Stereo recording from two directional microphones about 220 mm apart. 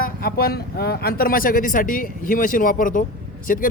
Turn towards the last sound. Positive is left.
turn(degrees=40)  # may be behind; listen again after turning